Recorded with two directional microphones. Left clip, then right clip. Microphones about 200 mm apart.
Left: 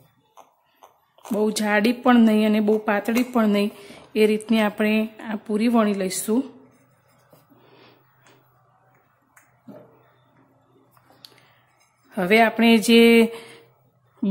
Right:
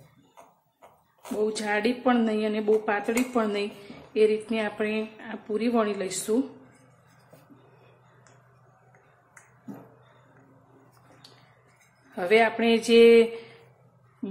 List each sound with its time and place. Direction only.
1.4 s a woman's voice: 50° left (ahead or behind)
12.1 s a woman's voice: 50° left (ahead or behind)